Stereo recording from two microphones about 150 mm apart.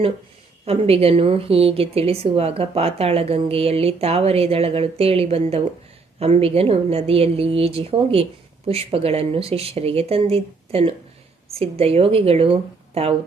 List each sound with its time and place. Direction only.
0.6 s a woman's voice: 40° right (ahead or behind)